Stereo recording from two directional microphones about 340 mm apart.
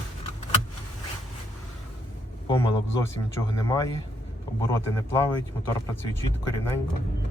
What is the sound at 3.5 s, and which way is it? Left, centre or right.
Speech, centre.